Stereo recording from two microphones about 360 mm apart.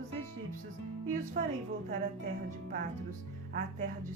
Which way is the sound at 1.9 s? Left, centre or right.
Right.